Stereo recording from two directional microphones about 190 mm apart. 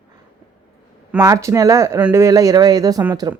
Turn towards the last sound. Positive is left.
turn(degrees=-20)  # may be behind; listen again after turning